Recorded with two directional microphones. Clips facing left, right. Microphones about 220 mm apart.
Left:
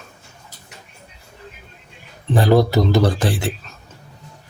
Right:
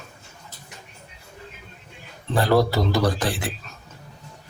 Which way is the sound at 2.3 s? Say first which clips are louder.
Left 4 dB; 20° left (ahead or behind).